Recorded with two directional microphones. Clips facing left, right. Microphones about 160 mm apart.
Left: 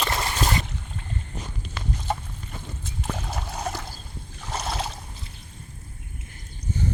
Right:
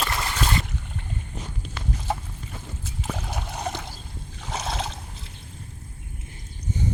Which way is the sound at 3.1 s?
Centre (ahead or behind).